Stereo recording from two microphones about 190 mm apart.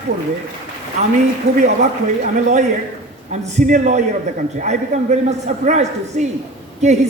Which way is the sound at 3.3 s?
35° right (ahead or behind).